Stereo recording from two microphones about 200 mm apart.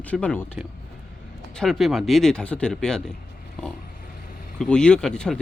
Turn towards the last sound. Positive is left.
turn(degrees=5)  # may be behind; listen again after turning